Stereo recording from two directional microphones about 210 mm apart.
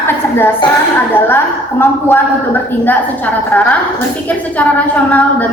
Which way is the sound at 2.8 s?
5° left (ahead or behind).